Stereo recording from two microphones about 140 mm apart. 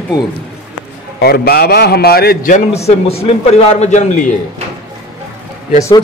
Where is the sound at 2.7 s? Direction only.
50° left (ahead or behind).